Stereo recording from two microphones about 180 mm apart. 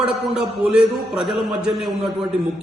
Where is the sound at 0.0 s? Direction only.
5° right (ahead or behind).